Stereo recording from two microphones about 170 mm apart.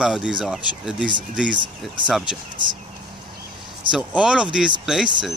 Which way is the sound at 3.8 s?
5° right (ahead or behind).